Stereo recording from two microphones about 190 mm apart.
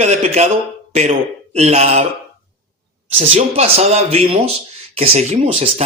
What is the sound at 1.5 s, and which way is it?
Speech, 35° right (ahead or behind).